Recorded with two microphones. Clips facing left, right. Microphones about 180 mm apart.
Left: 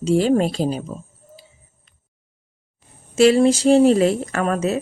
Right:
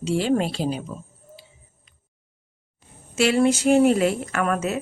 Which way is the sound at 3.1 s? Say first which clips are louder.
Left 5 dB; 40° left (ahead or behind).